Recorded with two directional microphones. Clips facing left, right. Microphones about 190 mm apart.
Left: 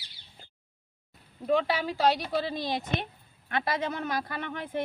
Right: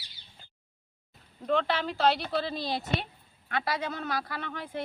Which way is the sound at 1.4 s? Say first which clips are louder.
Left 2 dB; 10° left (ahead or behind).